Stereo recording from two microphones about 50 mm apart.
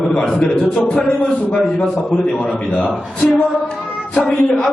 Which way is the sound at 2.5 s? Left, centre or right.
Centre.